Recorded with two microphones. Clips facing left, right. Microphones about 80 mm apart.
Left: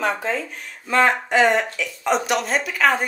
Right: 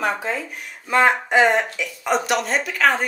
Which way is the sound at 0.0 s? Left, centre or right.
Centre.